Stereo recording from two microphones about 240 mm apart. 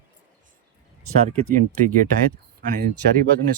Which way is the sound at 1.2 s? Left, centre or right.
Right.